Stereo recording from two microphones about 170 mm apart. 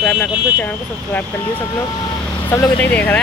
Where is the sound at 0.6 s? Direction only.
10° left (ahead or behind).